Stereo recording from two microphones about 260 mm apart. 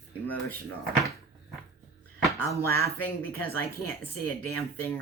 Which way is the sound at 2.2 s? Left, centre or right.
Centre.